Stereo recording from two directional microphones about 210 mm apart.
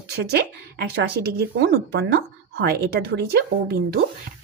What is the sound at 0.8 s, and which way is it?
A woman's voice, 50° right (ahead or behind).